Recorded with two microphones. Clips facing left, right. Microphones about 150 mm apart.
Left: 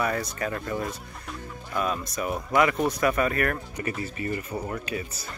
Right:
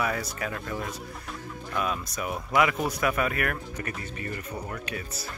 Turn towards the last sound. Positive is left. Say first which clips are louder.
# left 3 dB
turn(degrees=0)  # may be behind; listen again after turning